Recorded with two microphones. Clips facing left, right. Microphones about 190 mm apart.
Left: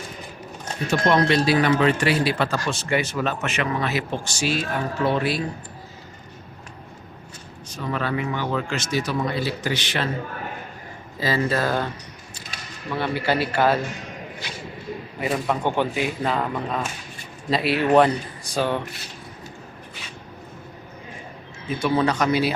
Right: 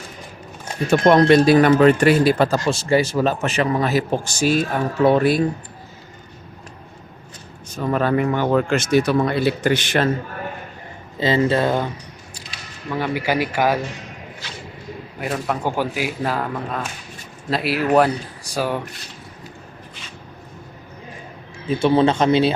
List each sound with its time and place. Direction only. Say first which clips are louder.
0.9 s speech: right 7 dB; 50° right (ahead or behind)
2.6 s a man's voice: right 6 dB; 30° right (ahead or behind); by 5.4 s 50° right (ahead or behind)
7.8 s speech: right 7 dB; 45° right (ahead or behind)
11.2 s speech: right 5 dB; 25° right (ahead or behind)
13.0 s speech: right 2 dB; 10° right (ahead or behind)
14.4 s a sound: left 1 dB; 15° left (ahead or behind)
15.2 s speech: even; centre (ahead or behind)
21.8 s speech: right 5 dB; 25° right (ahead or behind)